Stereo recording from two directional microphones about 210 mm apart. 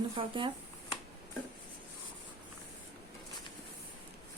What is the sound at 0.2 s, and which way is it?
Speech, 25° right (ahead or behind).